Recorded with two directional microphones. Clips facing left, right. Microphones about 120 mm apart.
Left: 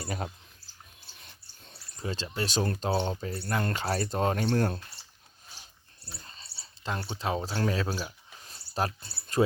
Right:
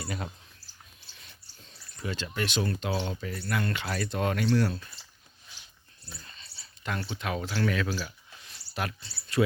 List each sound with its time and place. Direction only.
0.0 s speech: 40° left (ahead or behind)
1.7 s speech: 35° left (ahead or behind)
4.4 s speech: 50° left (ahead or behind)
6.1 s speech: 35° left (ahead or behind)
8.4 s a sound: 35° left (ahead or behind)
9.0 s speech: 50° left (ahead or behind)